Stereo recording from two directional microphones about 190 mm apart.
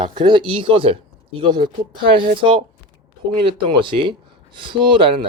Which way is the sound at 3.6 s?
25° right (ahead or behind).